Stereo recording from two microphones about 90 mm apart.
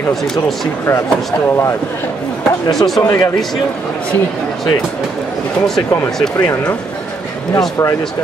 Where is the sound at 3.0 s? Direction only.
35° left (ahead or behind).